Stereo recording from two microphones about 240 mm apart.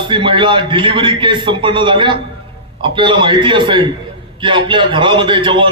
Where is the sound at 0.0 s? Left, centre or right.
Right.